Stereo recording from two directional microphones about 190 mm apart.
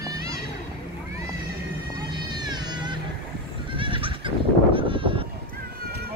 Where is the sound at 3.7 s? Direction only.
25° right (ahead or behind).